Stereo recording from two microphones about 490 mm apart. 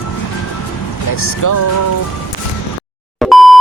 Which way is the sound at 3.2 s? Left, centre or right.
Centre.